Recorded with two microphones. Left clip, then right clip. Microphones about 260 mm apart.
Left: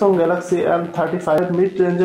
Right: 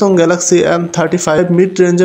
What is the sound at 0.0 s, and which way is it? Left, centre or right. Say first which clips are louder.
Speech: right 5 dB; right.